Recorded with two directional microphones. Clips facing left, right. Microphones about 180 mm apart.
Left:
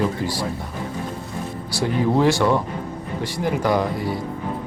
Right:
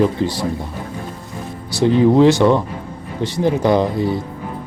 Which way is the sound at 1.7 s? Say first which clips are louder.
Right 8 dB; 20° right (ahead or behind).